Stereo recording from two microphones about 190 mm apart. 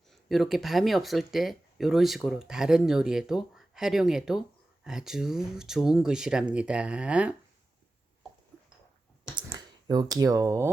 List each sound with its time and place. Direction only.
0.1 s speech: centre (ahead or behind)
9.3 s typing: 20° right (ahead or behind)